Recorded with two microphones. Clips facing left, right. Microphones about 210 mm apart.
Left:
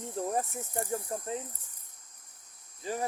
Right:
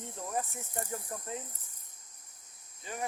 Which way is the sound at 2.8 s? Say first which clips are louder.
Left 5 dB; 35° left (ahead or behind).